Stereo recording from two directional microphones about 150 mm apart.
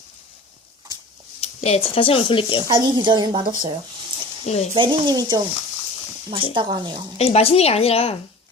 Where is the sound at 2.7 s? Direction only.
25° right (ahead or behind).